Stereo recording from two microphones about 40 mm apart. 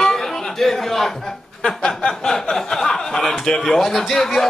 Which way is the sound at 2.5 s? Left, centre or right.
Centre.